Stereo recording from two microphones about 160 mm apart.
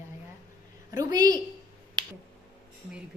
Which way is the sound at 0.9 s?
20° right (ahead or behind).